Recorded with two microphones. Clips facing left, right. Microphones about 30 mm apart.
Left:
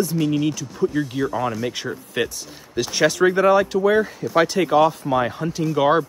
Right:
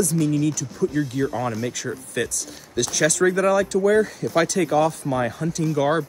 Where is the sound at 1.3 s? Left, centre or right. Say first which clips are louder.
Left 2 dB; centre.